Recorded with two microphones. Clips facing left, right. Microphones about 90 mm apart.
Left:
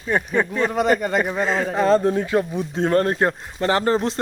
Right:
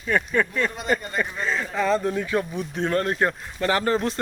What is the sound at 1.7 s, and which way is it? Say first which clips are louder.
Speech: left 5 dB; 35° left (ahead or behind).